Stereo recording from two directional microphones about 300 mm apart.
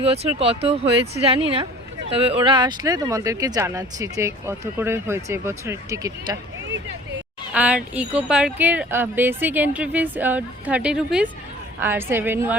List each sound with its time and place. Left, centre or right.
0.0 s speech: centre
7.5 s speech: centre